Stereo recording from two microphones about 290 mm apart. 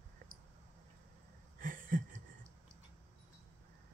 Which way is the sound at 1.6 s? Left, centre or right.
Right.